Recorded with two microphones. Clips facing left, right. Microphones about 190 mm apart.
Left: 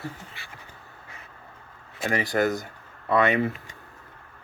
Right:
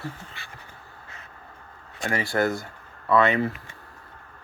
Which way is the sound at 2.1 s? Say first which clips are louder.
Even; 20° left (ahead or behind).